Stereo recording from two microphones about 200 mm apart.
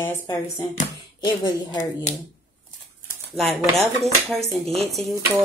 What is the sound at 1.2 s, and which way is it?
Speech, 20° left (ahead or behind).